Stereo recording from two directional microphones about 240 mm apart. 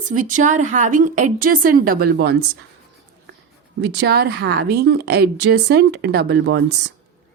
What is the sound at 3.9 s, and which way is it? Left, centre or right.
A woman's voice, right.